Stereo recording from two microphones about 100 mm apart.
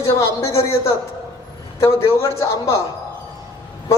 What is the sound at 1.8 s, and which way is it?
Speech, 30° left (ahead or behind).